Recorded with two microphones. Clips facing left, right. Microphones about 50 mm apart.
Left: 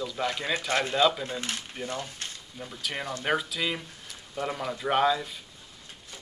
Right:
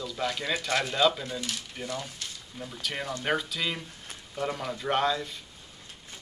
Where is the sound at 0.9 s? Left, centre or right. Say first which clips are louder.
Left 1 dB; centre.